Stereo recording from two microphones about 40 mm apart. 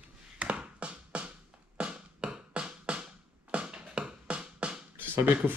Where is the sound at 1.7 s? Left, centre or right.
Right.